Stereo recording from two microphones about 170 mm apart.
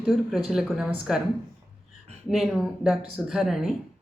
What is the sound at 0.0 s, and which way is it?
A woman's voice, centre (ahead or behind).